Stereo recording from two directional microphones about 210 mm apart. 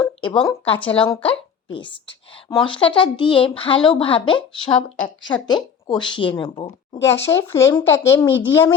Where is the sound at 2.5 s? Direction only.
25° left (ahead or behind).